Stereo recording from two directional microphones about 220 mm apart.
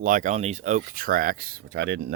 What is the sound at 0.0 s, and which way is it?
Speech, 35° right (ahead or behind).